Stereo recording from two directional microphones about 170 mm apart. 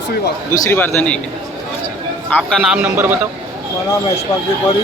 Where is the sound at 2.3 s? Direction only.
Centre (ahead or behind).